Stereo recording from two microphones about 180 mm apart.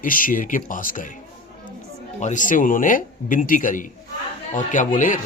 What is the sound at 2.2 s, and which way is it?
Speech, 45° left (ahead or behind).